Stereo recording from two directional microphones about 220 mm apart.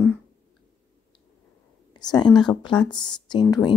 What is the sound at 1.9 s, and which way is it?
Speech, 20° left (ahead or behind).